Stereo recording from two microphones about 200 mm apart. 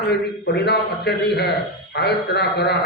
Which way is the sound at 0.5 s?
55° left (ahead or behind).